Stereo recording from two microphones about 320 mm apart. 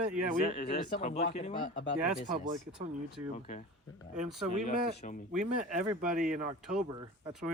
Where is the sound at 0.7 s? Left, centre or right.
Centre.